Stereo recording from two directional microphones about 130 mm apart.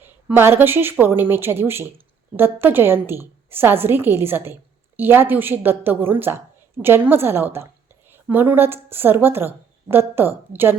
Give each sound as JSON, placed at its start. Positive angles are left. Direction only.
{"t": 0.0, "sound": "a woman's voice", "side_deg": -15}